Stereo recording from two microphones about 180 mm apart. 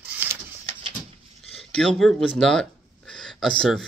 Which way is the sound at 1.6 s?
Centre (ahead or behind).